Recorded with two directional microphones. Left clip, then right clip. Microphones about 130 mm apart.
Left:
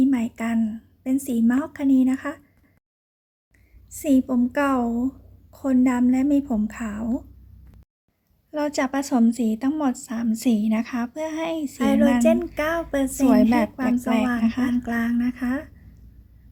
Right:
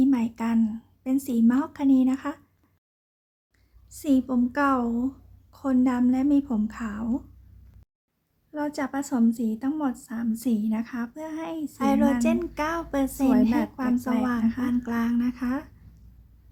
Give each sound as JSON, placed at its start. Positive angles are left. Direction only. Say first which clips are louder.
{"t": 0.0, "sound": "a woman's voice", "louder": "left 2 dB", "side_deg": 10}
{"t": 3.9, "sound": "a woman's voice", "louder": "left 3 dB", "side_deg": 15}
{"t": 8.5, "sound": "a woman's voice", "louder": "left 5 dB", "side_deg": 25}